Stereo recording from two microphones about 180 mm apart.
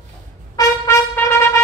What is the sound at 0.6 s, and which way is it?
Trumpet, 15° left (ahead or behind).